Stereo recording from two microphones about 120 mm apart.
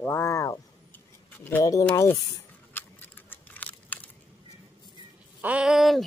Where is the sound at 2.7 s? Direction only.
15° left (ahead or behind).